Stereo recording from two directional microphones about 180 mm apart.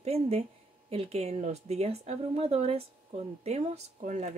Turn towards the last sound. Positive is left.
turn(degrees=-40)  # may be behind; listen again after turning